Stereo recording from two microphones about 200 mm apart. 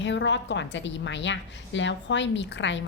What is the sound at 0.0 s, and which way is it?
A woman's voice, 65° left (ahead or behind).